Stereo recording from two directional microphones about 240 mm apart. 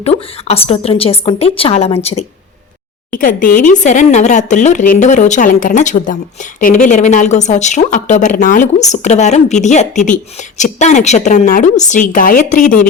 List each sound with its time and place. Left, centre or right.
0.0 s speech: left